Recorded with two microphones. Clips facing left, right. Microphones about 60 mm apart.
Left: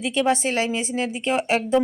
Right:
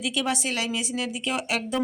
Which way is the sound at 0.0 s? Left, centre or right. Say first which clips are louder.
Left 6 dB; left.